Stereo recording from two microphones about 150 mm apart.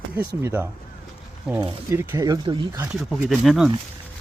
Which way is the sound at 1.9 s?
15° right (ahead or behind).